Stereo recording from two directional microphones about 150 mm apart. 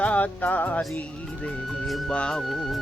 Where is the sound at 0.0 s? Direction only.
10° left (ahead or behind).